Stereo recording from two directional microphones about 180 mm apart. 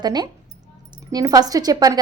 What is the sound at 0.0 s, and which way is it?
A woman's voice, 25° right (ahead or behind).